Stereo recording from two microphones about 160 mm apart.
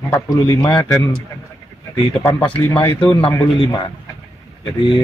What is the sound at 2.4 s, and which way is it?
A man's voice, 35° left (ahead or behind).